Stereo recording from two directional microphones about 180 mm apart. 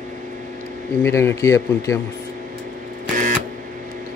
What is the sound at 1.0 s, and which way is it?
Speech, 15° left (ahead or behind).